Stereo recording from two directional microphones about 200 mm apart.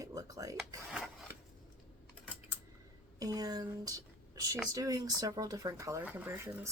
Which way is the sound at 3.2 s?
20° right (ahead or behind).